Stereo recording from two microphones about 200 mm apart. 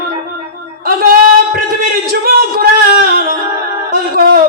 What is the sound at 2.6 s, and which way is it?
Speech, 50° right (ahead or behind).